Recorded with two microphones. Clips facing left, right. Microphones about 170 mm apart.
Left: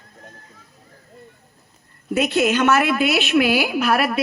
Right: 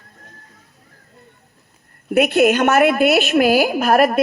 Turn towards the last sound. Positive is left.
turn(degrees=-45)  # may be behind; listen again after turning